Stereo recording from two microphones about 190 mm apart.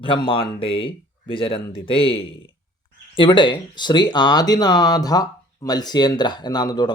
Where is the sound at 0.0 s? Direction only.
25° left (ahead or behind).